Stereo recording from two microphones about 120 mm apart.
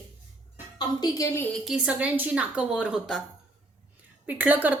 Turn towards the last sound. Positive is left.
turn(degrees=-15)  # may be behind; listen again after turning